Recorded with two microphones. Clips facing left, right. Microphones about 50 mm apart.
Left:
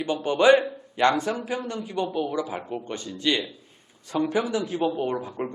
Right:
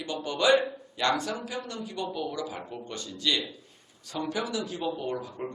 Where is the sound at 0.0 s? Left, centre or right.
Left.